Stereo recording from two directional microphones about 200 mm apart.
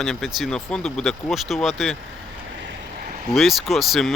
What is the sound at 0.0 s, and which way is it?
Speech, centre (ahead or behind).